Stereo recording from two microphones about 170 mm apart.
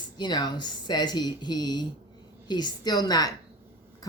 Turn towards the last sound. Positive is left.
turn(degrees=20)  # may be behind; listen again after turning